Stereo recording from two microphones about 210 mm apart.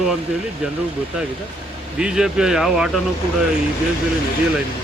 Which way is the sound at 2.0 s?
5° right (ahead or behind).